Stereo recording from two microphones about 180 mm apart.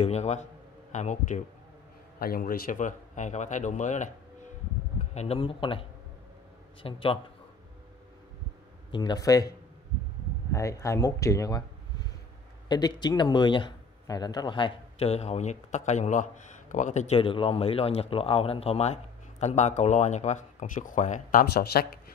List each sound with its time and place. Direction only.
0.0 s speech: 40° left (ahead or behind)
2.1 s speech: 55° left (ahead or behind)
5.1 s a man's voice: 35° left (ahead or behind)
8.9 s a man's voice: 25° left (ahead or behind)
10.5 s speech: 15° left (ahead or behind)
12.6 s speech: 25° left (ahead or behind); by 21.8 s 55° left (ahead or behind)